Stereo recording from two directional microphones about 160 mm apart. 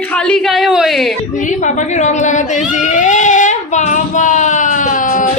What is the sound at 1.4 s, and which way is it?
Speech, 50° left (ahead or behind).